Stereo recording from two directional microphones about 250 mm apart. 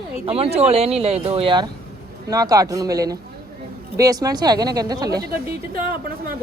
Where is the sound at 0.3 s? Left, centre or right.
Right.